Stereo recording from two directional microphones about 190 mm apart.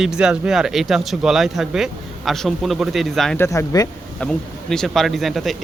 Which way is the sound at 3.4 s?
15° left (ahead or behind).